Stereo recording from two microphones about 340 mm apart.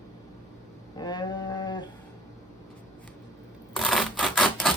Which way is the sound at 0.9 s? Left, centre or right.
Centre.